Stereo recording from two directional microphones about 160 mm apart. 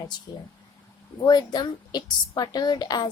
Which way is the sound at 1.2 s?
25° left (ahead or behind).